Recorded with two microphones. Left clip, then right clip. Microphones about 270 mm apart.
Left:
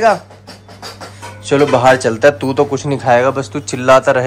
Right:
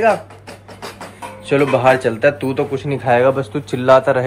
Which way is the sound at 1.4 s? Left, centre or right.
Centre.